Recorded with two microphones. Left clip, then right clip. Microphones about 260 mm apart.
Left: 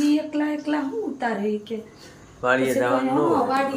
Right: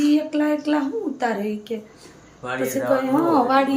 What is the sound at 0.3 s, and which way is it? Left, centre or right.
A woman's voice, centre.